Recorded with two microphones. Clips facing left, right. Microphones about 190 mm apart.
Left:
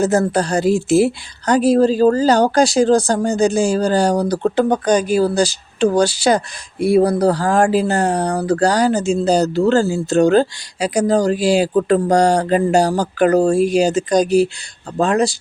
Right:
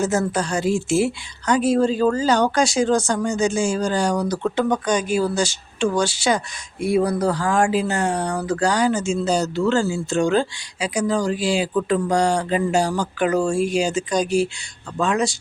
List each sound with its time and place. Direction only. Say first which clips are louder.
0.0 s speech: left 5 dB; 35° left (ahead or behind)